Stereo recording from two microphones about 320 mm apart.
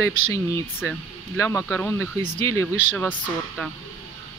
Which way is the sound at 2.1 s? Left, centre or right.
Right.